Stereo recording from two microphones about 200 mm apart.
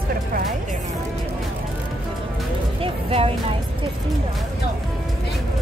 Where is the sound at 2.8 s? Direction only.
30° right (ahead or behind).